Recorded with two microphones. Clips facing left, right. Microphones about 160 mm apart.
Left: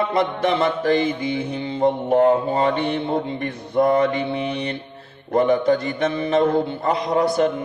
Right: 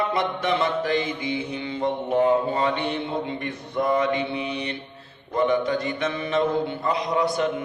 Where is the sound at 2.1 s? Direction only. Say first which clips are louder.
Left 4 dB; 55° left (ahead or behind).